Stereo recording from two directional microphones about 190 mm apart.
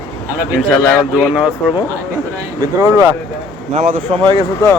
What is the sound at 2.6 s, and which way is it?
Speech, 15° right (ahead or behind).